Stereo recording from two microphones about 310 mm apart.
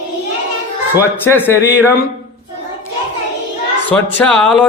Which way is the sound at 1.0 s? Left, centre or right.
Centre.